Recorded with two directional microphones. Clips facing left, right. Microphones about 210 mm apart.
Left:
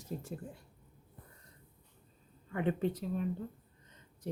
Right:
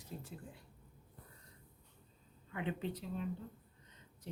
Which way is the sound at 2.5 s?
50° left (ahead or behind).